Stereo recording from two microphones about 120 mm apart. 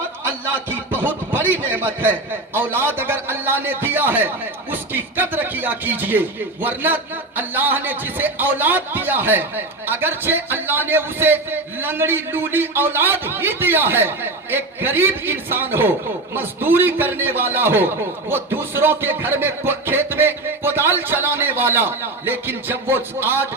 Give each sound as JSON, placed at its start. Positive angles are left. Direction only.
{"t": 0.7, "sound": "speech", "side_deg": -15}